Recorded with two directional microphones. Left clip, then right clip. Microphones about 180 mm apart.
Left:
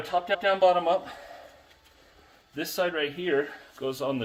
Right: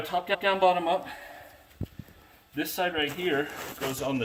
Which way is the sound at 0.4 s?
15° left (ahead or behind).